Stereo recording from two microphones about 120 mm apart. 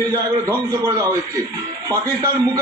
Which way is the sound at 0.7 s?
30° right (ahead or behind).